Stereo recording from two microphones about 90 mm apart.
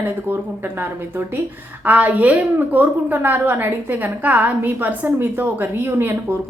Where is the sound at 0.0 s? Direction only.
25° right (ahead or behind).